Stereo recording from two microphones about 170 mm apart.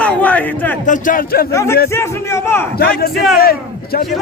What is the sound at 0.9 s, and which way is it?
Speech, 50° left (ahead or behind).